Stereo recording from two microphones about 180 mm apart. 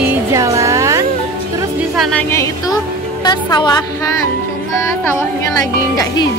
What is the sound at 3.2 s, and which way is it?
Speech, 25° left (ahead or behind).